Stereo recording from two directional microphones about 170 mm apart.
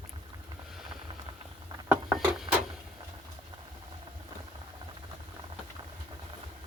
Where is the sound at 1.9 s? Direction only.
5° right (ahead or behind).